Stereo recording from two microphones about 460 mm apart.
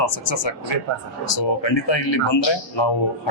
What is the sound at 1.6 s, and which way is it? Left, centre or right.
A man's voice, left.